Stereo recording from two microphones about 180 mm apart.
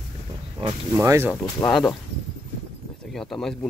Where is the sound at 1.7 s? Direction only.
Centre (ahead or behind).